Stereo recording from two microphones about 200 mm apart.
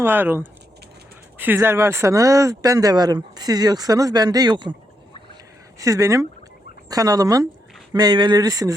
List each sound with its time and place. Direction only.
0.0 s speech: 10° right (ahead or behind)
5.8 s speech: 15° right (ahead or behind)